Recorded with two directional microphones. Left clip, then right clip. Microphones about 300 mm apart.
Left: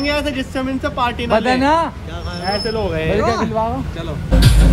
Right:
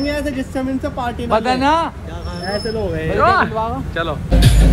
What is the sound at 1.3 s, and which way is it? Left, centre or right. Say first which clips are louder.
Speech: even; left.